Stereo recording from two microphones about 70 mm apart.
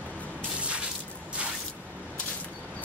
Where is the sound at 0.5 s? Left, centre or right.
Centre.